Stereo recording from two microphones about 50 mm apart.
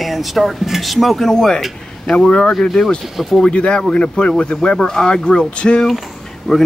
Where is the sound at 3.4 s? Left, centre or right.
Centre.